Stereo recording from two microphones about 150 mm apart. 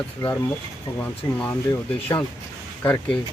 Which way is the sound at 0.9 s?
15° left (ahead or behind).